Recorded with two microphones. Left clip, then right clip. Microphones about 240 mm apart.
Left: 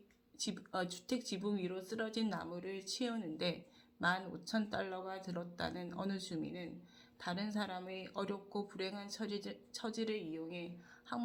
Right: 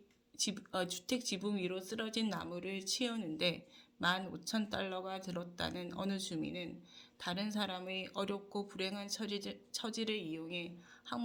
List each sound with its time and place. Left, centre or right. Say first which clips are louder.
0.3 s speech: right 3 dB; right